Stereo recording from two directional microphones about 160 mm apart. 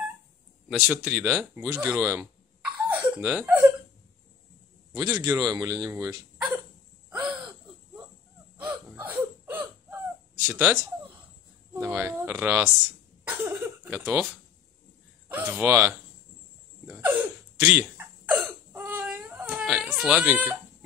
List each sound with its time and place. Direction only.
0.7 s speech: 5° right (ahead or behind)
5.2 s speech: 20° right (ahead or behind)
7.1 s gasp: 5° right (ahead or behind)
9.0 s hiccup: 10° right (ahead or behind)
10.4 s speech: 15° right (ahead or behind)
13.3 s a sound: 15° right (ahead or behind)
15.2 s speech: 10° right (ahead or behind)
16.8 s hiccup: 10° right (ahead or behind)
18.7 s baby cry: 10° right (ahead or behind)